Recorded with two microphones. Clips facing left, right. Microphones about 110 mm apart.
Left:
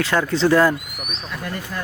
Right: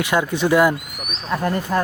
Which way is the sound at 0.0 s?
15° right (ahead or behind).